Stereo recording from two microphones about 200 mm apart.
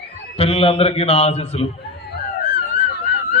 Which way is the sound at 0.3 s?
30° left (ahead or behind).